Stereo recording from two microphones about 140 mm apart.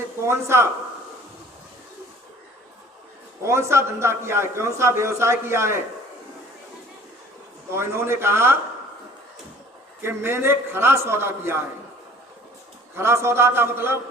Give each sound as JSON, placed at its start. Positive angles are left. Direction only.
{"t": 0.2, "sound": "a man's voice", "side_deg": -20}
{"t": 3.4, "sound": "a man's voice", "side_deg": -20}
{"t": 7.7, "sound": "a man's voice", "side_deg": -20}
{"t": 10.0, "sound": "a man's voice", "side_deg": -15}
{"t": 13.0, "sound": "a man's voice", "side_deg": -20}